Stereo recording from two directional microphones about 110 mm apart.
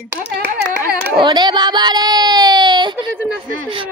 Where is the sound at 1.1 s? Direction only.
45° right (ahead or behind).